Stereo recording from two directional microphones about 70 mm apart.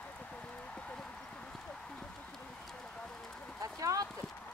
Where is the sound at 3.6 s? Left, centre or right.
Right.